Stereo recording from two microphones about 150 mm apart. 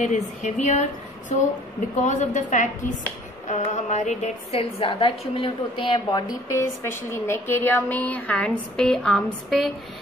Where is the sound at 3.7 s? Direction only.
50° left (ahead or behind); by 5.9 s 35° left (ahead or behind).